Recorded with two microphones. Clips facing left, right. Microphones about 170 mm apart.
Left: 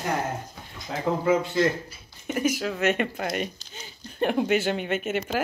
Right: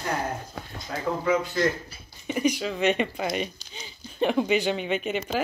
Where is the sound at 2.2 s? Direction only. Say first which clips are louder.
Even; 5° left (ahead or behind).